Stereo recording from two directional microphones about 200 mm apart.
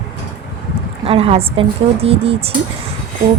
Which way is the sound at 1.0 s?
30° right (ahead or behind).